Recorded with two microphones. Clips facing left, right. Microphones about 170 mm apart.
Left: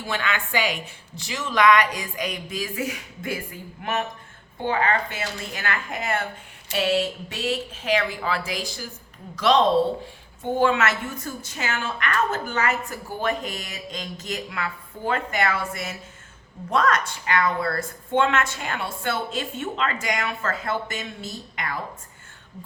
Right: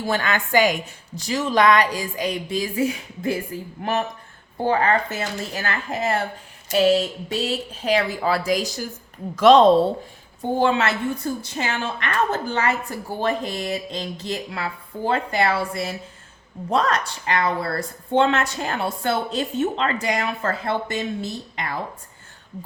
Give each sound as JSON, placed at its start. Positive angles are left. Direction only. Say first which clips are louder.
{"t": 0.0, "sound": "a woman's voice", "louder": "right 4 dB", "side_deg": -40}
{"t": 10.6, "sound": "a woman's voice", "louder": "right 1 dB", "side_deg": -30}